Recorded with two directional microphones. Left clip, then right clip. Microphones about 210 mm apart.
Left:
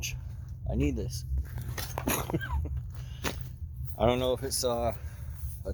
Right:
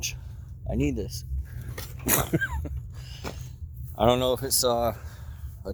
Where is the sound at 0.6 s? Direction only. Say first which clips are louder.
Right 4 dB; 55° right (ahead or behind).